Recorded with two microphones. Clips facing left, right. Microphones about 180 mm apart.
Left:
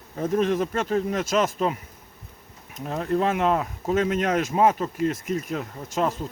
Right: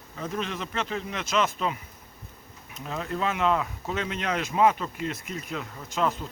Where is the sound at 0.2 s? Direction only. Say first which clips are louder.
Left 10 dB; 45° left (ahead or behind).